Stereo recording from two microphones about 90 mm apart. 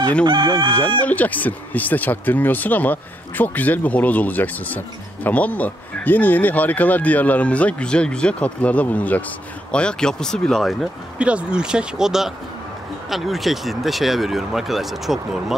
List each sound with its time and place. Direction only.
0.3 s chicken: 65° right (ahead or behind)
1.0 s speech: 20° left (ahead or behind); by 10.9 s centre (ahead or behind)
11.1 s speech: 10° right (ahead or behind)